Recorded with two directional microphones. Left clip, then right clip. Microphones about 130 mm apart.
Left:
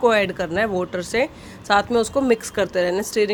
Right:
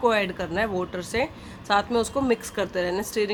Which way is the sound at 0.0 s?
40° left (ahead or behind).